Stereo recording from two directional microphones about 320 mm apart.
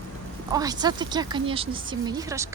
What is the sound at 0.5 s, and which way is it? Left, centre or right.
Speech, centre.